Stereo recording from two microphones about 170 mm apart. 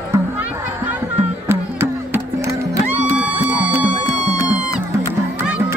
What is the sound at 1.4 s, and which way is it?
Music, 15° right (ahead or behind).